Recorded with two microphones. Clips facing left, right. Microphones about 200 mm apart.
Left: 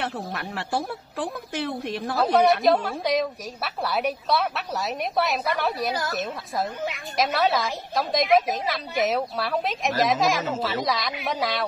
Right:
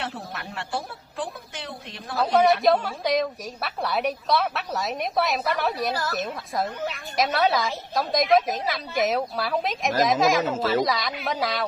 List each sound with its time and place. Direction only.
0.0 s speech: 60° left (ahead or behind)
2.1 s a woman's voice: centre (ahead or behind)